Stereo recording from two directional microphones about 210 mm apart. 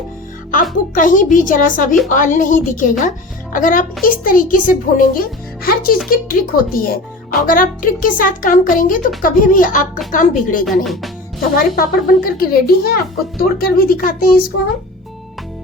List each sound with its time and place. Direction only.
0.5 s speech: 40° left (ahead or behind)